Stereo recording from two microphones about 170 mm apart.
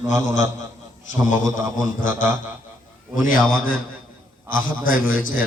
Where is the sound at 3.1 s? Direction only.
55° left (ahead or behind).